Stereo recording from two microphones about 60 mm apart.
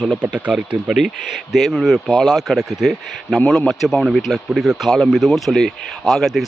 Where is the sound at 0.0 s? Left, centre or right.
Centre.